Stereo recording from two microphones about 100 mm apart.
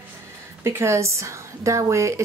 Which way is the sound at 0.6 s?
25° right (ahead or behind).